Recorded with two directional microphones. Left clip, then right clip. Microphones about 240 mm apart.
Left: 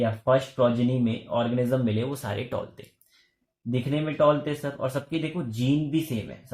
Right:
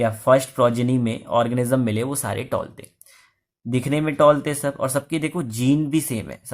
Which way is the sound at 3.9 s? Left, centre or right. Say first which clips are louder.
Right 6 dB; right.